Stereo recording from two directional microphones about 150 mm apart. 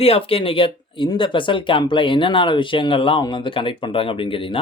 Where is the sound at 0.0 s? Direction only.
40° left (ahead or behind).